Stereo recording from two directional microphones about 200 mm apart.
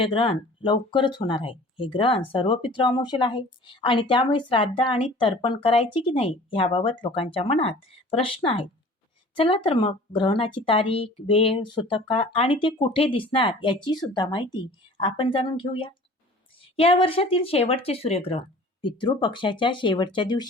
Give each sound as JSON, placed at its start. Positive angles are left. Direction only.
{"t": 0.0, "sound": "speech", "side_deg": 25}